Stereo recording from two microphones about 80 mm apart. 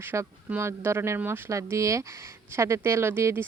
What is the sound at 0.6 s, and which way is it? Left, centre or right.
Speech, right.